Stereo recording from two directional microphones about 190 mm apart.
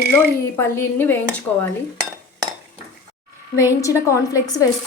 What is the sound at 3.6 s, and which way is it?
Speech, 15° left (ahead or behind).